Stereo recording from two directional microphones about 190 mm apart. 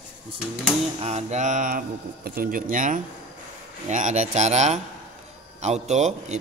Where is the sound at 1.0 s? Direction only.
35° right (ahead or behind).